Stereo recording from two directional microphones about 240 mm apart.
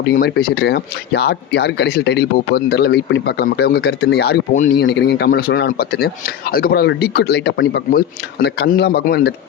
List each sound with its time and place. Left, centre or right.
0.0 s speech: left